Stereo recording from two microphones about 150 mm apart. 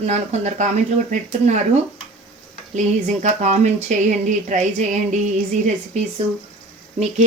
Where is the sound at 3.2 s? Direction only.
50° right (ahead or behind).